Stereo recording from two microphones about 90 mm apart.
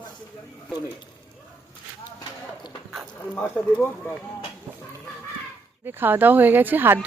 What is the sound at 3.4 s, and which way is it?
Speech, 25° left (ahead or behind).